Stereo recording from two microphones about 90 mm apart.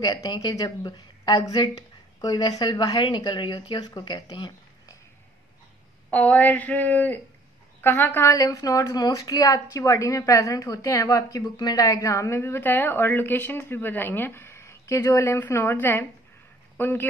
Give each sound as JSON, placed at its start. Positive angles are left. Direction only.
{"t": 0.0, "sound": "a woman's voice", "side_deg": 50}
{"t": 6.0, "sound": "speech", "side_deg": 15}
{"t": 8.3, "sound": "speech", "side_deg": 40}